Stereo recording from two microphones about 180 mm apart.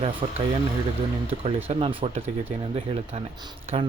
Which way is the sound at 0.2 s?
35° right (ahead or behind).